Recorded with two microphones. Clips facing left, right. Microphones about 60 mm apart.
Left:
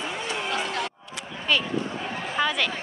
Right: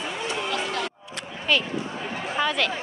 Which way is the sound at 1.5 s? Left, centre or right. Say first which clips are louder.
Even; centre.